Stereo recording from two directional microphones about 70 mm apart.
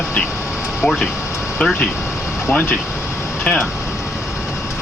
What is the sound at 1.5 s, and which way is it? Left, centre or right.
Speech, centre.